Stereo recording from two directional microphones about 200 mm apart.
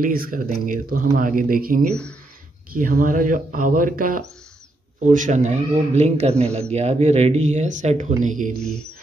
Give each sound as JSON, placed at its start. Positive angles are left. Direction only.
{"t": 0.0, "sound": "speech", "side_deg": -45}
{"t": 8.5, "sound": "speech", "side_deg": 0}